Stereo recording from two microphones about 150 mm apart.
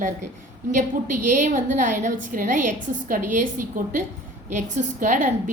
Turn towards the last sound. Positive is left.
turn(degrees=-60)  # may be behind; listen again after turning